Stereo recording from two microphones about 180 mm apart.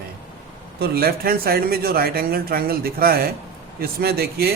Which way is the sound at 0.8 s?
60° right (ahead or behind).